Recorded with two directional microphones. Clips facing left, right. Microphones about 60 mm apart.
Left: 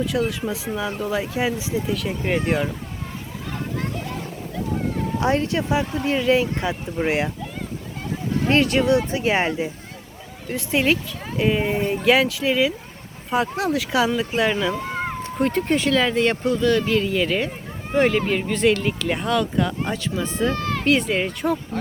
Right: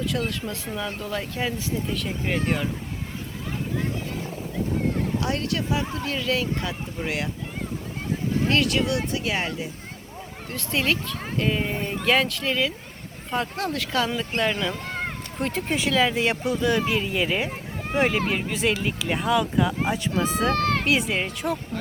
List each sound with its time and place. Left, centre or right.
0.0 s speech: centre
5.2 s speech: left
8.4 s speech: left
10.5 s speech: centre
20.5 s speech: right
20.8 s speech: centre